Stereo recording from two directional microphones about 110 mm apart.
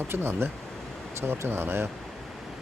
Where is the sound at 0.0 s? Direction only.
20° right (ahead or behind).